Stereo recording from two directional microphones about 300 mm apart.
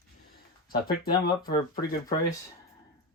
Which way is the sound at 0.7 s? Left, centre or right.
Left.